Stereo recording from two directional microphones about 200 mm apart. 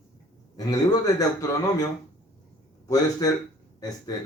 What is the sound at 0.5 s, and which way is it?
A man's voice, 20° left (ahead or behind).